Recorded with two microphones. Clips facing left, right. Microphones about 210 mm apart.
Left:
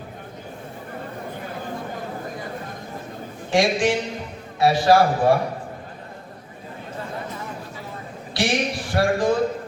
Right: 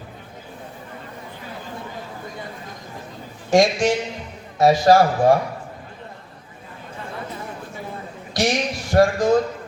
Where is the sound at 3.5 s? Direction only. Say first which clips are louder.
Right 3 dB; 45° right (ahead or behind).